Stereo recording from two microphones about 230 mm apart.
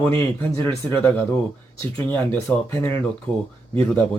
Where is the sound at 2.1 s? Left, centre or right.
Centre.